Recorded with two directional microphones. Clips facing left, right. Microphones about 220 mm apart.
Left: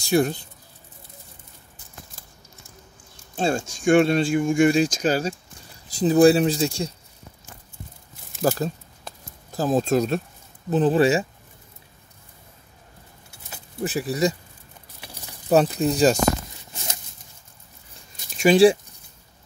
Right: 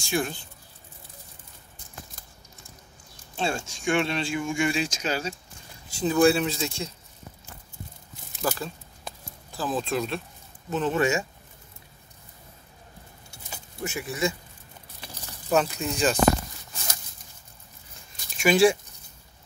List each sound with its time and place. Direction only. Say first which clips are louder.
0.0 s speech: left 8 dB; 40° left (ahead or behind)
3.3 s speech: left 6 dB; 45° left (ahead or behind)
8.4 s speech: left 7 dB; 40° left (ahead or behind)
13.8 s speech: left 6 dB; 35° left (ahead or behind)
15.5 s speech: left 6 dB; 35° left (ahead or behind)
16.7 s a sound: left 3 dB; 20° left (ahead or behind)
18.4 s speech: left 5 dB; 35° left (ahead or behind)